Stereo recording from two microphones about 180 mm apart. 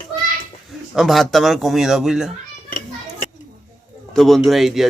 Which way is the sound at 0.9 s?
Centre (ahead or behind).